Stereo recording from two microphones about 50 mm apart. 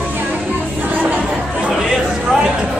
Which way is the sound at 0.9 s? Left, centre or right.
Right.